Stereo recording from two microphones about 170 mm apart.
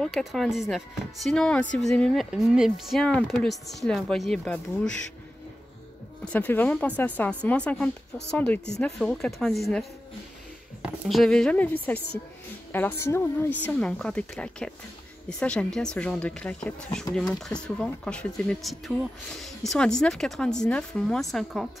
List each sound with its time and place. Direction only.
0.0 s speech: centre (ahead or behind)
6.2 s speech: 10° left (ahead or behind)
10.8 s speech: 5° right (ahead or behind)